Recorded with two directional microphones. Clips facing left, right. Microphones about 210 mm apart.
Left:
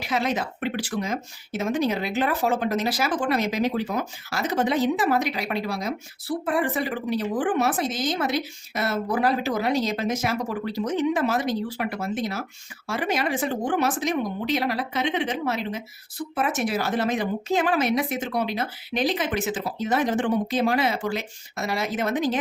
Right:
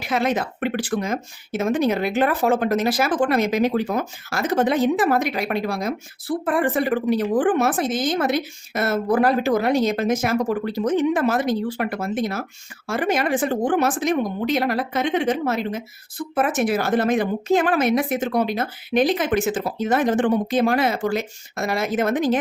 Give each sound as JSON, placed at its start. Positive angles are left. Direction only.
{"t": 0.1, "sound": "speech", "side_deg": -55}